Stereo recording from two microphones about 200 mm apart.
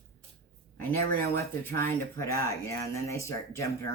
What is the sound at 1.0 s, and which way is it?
Speech, 50° right (ahead or behind).